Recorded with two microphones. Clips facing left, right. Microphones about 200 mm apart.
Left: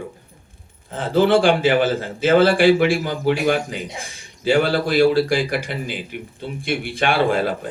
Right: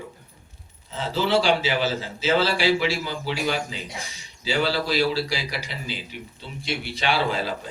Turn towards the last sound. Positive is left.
turn(degrees=55)  # may be behind; listen again after turning